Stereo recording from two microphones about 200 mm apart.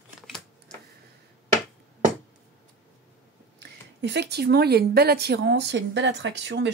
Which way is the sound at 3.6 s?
60° right (ahead or behind).